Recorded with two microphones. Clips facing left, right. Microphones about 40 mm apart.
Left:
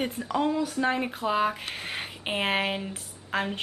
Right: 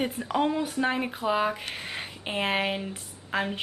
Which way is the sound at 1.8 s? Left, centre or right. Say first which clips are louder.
Left 1 dB; centre.